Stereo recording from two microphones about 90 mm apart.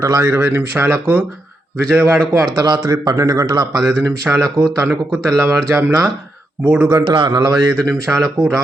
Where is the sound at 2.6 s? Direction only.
50° right (ahead or behind).